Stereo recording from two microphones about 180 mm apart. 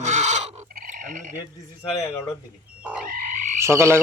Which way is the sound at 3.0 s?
50° right (ahead or behind).